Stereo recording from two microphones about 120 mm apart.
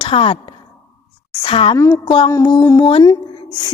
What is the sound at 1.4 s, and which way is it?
Speech, 50° left (ahead or behind).